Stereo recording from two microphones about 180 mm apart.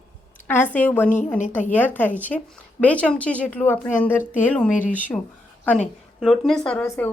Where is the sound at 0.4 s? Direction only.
10° left (ahead or behind).